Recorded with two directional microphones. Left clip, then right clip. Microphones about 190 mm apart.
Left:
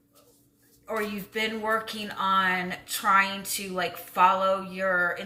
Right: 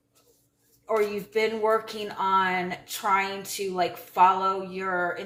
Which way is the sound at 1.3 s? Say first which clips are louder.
Right 3 dB; 25° right (ahead or behind).